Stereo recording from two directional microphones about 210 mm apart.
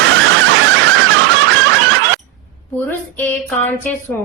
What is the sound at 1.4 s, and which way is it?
Snicker, 65° right (ahead or behind).